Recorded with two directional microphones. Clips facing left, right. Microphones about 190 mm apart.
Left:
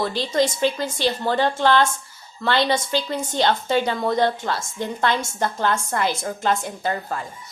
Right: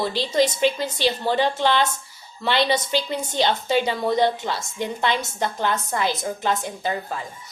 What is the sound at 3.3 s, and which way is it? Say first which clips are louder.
A woman's voice: left 1 dB; 20° right (ahead or behind).